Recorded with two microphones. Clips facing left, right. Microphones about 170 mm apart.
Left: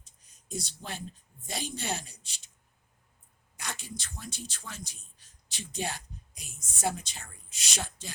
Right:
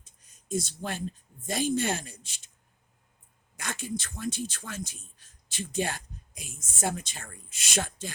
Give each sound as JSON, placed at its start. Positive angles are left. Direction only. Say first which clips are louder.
{"t": 0.0, "sound": "a sound", "louder": "right 1 dB", "side_deg": -50}
{"t": 1.5, "sound": "a man's voice", "louder": "right 8 dB", "side_deg": -50}
{"t": 3.6, "sound": "a man's voice", "louder": "right 7 dB", "side_deg": -50}